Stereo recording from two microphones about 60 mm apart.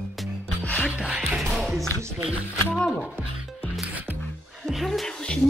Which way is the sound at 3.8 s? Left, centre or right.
Right.